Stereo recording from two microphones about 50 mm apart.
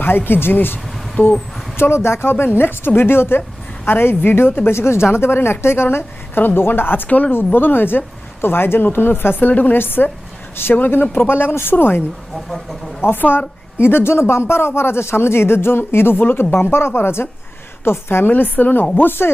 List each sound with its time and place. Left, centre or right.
0.3 s speech: left
2.0 s speech: left
7.1 s speech: left
7.3 s speech: left
11.3 s speech: left